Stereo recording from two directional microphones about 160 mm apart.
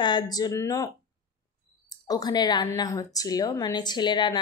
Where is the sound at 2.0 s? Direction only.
25° left (ahead or behind).